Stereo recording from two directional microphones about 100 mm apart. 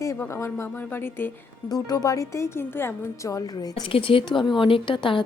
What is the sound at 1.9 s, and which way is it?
A woman's voice, 35° left (ahead or behind).